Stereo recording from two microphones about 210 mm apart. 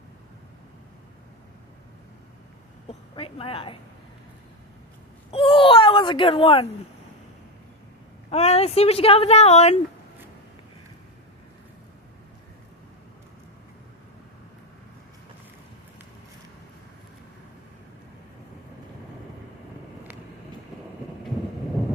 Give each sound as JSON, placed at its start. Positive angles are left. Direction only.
{"t": 3.2, "sound": "speech", "side_deg": 25}
{"t": 5.3, "sound": "whimper", "side_deg": 25}
{"t": 8.3, "sound": "speech", "side_deg": 30}